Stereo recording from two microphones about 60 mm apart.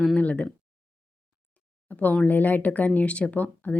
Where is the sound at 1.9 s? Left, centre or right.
Left.